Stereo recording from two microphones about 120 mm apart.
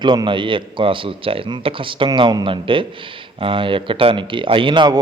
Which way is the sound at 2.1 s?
35° right (ahead or behind).